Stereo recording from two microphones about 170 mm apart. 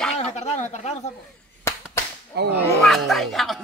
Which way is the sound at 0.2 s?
40° left (ahead or behind).